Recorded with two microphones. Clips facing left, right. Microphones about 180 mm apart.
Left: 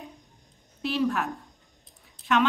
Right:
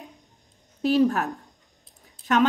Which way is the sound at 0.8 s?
40° right (ahead or behind).